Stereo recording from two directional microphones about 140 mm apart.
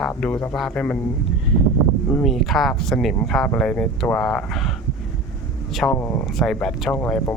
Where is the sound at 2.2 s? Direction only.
Centre (ahead or behind).